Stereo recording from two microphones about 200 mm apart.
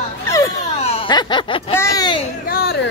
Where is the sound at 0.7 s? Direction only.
30° left (ahead or behind).